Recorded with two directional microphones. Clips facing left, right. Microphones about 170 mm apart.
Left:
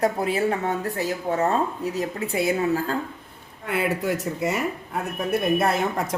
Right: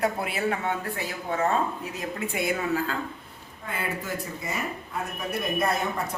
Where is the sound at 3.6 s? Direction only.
75° left (ahead or behind).